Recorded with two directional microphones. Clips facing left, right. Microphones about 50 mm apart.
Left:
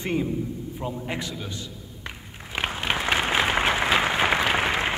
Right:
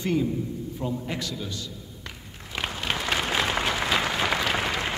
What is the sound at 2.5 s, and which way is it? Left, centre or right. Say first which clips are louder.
Applause: left 3 dB; left.